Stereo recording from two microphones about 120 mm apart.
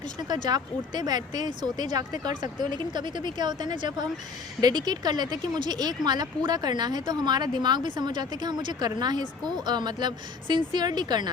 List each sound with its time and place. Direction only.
0.4 s speech: 35° right (ahead or behind)